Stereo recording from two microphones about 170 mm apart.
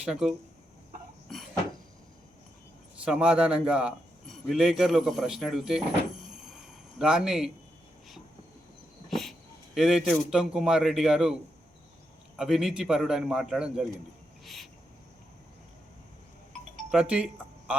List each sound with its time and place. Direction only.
0.0 s a man's voice: 5° right (ahead or behind)
1.3 s a sound: centre (ahead or behind)
3.0 s a man's voice: 5° right (ahead or behind)
9.0 s dog: centre (ahead or behind)
9.7 s a man's voice: centre (ahead or behind)
12.4 s a man's voice: centre (ahead or behind)
14.4 s cricket: centre (ahead or behind)
16.9 s speech: 5° right (ahead or behind)